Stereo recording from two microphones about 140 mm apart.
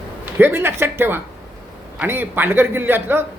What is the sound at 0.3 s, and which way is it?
A man's voice, 15° right (ahead or behind).